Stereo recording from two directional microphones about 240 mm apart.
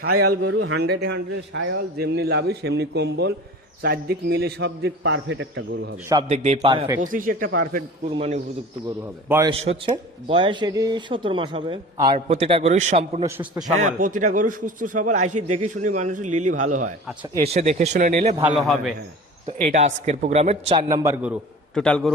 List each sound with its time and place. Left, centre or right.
0.3 s a man's voice: right
6.2 s speech: right
7.0 s a man's voice: right
8.1 s speech: right
9.3 s a man's voice: centre
9.6 s speech: right
13.2 s a man's voice: centre
13.7 s a man's voice: right
18.4 s a man's voice: centre
19.5 s speech: right
21.0 s a man's voice: centre
21.8 s a man's voice: centre